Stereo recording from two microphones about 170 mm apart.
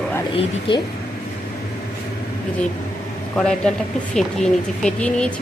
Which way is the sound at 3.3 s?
5° left (ahead or behind).